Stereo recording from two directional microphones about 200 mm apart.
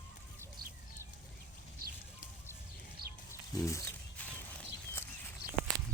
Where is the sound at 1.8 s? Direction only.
50° right (ahead or behind).